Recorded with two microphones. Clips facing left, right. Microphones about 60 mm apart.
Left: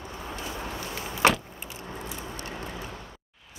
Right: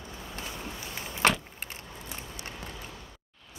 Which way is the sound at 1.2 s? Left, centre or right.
Centre.